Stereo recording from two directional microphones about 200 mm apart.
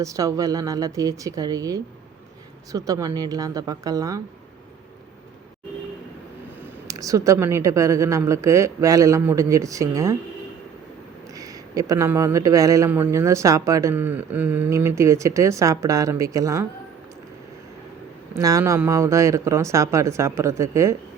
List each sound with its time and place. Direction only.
0.0 s speech: 15° right (ahead or behind)
6.8 s speech: 15° right (ahead or behind)
11.3 s speech: 15° right (ahead or behind)
18.3 s speech: 15° right (ahead or behind)